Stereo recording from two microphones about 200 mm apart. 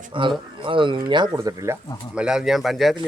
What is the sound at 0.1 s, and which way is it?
Speech, 25° right (ahead or behind).